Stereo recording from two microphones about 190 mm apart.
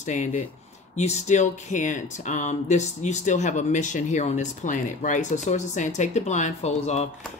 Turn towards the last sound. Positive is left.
turn(degrees=35)  # may be behind; listen again after turning